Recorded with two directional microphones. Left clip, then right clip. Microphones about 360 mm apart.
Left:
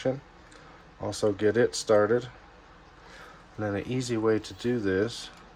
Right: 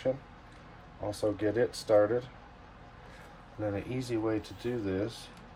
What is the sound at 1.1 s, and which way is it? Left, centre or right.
Speech, left.